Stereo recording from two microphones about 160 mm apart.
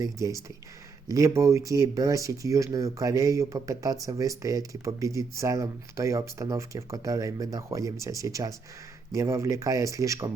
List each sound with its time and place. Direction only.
0.0 s speech: 20° right (ahead or behind)